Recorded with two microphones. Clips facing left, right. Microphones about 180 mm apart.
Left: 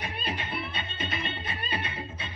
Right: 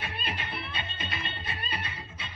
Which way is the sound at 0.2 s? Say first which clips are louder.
Left 3 dB; 50° left (ahead or behind).